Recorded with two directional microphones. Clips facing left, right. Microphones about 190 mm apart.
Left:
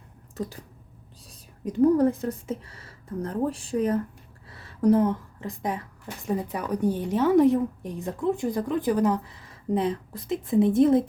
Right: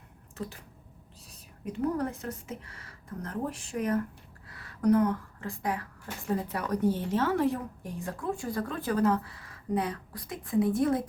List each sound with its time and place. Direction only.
1.6 s a woman's voice: 30° left (ahead or behind)